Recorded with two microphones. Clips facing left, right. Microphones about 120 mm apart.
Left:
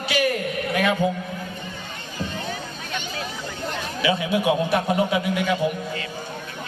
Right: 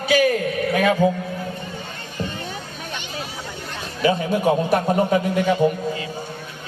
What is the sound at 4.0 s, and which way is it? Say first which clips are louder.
A man's voice: right 3 dB; 45° right (ahead or behind).